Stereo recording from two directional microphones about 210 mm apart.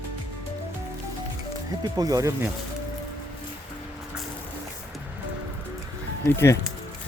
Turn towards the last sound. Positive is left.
turn(degrees=15)  # may be behind; listen again after turning